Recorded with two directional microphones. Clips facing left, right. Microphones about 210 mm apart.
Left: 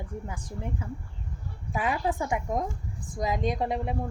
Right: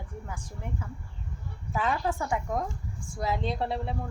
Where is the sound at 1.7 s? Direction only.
15° left (ahead or behind).